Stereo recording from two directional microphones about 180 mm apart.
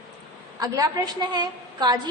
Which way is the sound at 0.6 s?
20° right (ahead or behind).